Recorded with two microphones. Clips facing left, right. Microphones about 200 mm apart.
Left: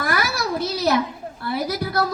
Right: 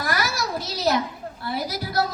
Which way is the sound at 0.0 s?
60° left (ahead or behind).